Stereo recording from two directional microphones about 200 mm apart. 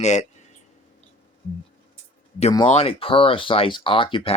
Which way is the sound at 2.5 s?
25° left (ahead or behind).